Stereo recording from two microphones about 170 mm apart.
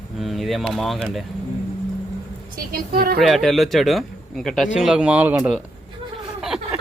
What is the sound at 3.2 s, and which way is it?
Speech, centre (ahead or behind).